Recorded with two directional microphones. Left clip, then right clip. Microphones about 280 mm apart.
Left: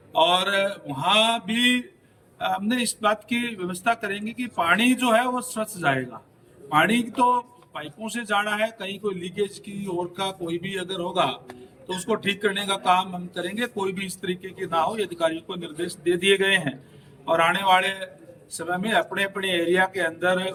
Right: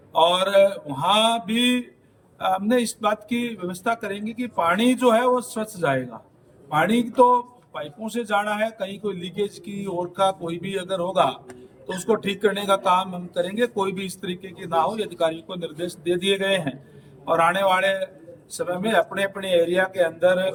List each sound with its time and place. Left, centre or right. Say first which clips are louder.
0.1 s speech: right 2 dB; centre